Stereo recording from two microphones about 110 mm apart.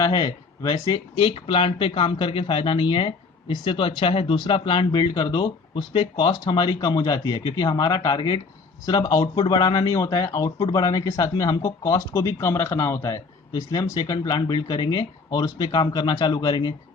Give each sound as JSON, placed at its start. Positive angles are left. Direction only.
{"t": 0.0, "sound": "speech", "side_deg": 35}